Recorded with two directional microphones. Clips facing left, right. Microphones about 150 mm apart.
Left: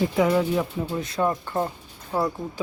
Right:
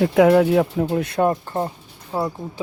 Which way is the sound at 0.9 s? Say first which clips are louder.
Right 5 dB; 60° right (ahead or behind).